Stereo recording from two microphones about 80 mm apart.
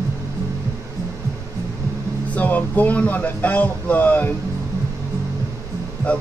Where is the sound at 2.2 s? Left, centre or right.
Centre.